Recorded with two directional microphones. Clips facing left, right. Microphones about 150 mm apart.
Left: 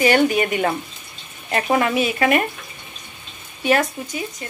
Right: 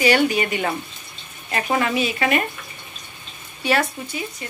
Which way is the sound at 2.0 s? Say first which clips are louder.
Left 3 dB; 55° left (ahead or behind).